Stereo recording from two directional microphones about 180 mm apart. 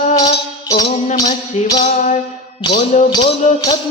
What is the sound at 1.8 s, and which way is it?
Music, 45° left (ahead or behind).